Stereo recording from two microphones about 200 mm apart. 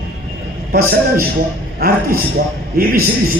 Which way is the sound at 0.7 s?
50° right (ahead or behind).